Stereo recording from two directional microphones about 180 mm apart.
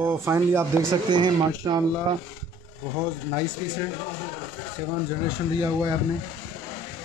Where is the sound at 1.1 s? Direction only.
25° right (ahead or behind).